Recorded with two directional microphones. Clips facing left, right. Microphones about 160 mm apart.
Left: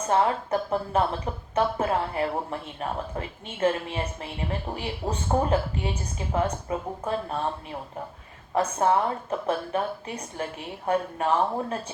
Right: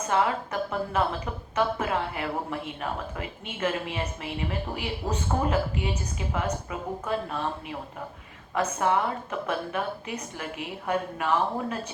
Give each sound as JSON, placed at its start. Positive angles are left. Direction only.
{"t": 0.1, "sound": "a woman's voice", "side_deg": 35}